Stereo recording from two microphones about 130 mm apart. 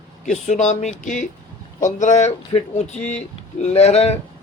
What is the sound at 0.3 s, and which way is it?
Speech, 65° left (ahead or behind).